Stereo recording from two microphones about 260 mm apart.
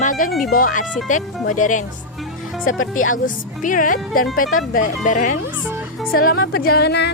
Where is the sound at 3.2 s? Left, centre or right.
Left.